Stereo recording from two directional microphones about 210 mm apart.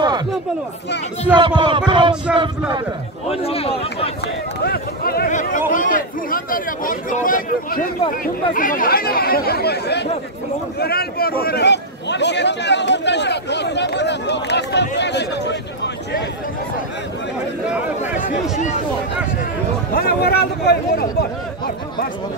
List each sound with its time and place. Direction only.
1.3 s speech: 20° right (ahead or behind)
3.3 s speech: 30° left (ahead or behind)
4.2 s speech: 50° left (ahead or behind)
17.6 s speech: 5° right (ahead or behind)
19.9 s speech: 50° left (ahead or behind)